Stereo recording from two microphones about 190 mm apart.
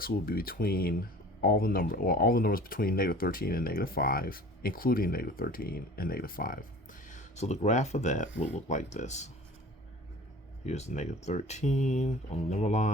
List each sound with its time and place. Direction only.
0.0 s speech: 50° left (ahead or behind)
10.7 s speech: 35° left (ahead or behind)